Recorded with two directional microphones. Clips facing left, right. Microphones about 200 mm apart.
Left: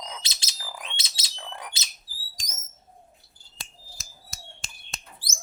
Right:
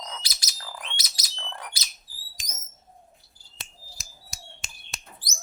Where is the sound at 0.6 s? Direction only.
15° left (ahead or behind).